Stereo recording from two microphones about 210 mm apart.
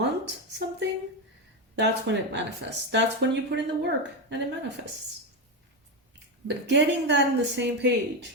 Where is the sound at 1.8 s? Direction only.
55° right (ahead or behind).